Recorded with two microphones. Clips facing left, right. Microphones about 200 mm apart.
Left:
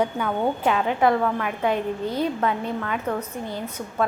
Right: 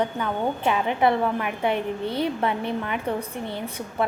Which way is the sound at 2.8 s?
15° right (ahead or behind).